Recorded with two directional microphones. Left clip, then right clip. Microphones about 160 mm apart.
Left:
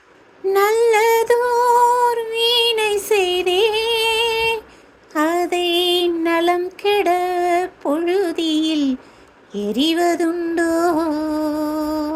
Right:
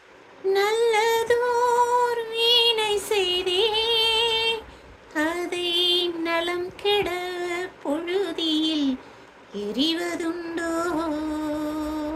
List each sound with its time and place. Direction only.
0.4 s a sound: 45° left (ahead or behind)
5.1 s child singing: 45° left (ahead or behind)
9.5 s music: 50° left (ahead or behind)